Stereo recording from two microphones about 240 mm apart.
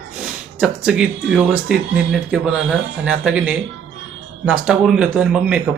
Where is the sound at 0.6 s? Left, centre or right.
Centre.